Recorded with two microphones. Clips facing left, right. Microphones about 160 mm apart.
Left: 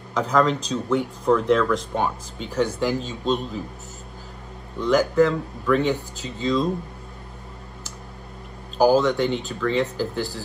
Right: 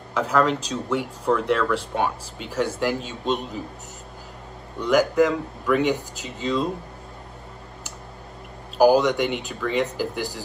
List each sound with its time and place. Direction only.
0.1 s speech: 5° right (ahead or behind)
3.0 s a man's voice: 35° left (ahead or behind)
4.7 s speech: 10° right (ahead or behind)
8.7 s speech: 15° right (ahead or behind)